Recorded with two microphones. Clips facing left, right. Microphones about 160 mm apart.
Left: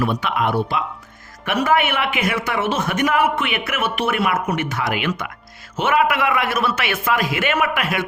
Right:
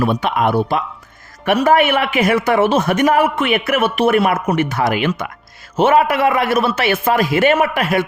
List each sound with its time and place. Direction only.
0.0 s a man's voice: 35° right (ahead or behind)